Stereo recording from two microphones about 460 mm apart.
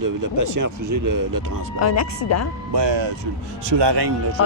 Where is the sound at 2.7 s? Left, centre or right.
Right.